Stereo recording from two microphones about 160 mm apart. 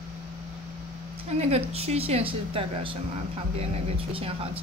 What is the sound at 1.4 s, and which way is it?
A woman's voice, 40° right (ahead or behind).